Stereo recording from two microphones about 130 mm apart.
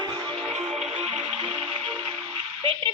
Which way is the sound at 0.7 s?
5° right (ahead or behind).